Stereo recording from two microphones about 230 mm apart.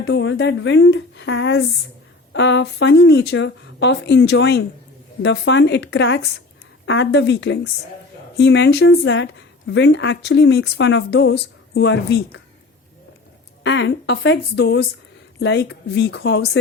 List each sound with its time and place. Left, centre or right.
0.0 s a woman's voice: left
13.7 s a woman's voice: left